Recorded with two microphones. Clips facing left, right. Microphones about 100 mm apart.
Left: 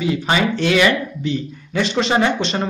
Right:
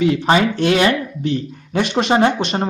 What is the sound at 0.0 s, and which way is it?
Speech, 55° right (ahead or behind).